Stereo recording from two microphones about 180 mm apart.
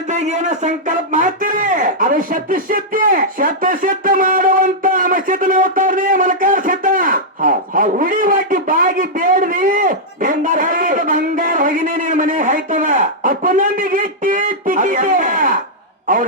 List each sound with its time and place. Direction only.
0.1 s a man's voice: 40° right (ahead or behind)